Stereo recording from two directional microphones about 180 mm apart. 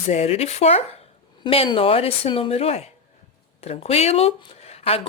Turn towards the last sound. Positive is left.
turn(degrees=35)  # may be behind; listen again after turning